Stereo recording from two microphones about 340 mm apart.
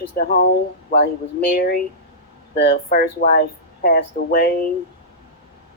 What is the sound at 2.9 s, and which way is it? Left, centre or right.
Speech, left.